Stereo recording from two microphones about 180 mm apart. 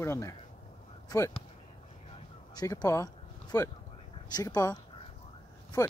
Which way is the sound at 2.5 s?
20° left (ahead or behind).